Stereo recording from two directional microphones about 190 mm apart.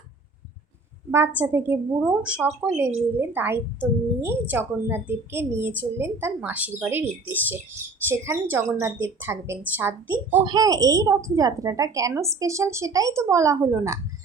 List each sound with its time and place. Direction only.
1.1 s a woman's voice: 10° right (ahead or behind)
10.4 s a woman's voice: 20° right (ahead or behind)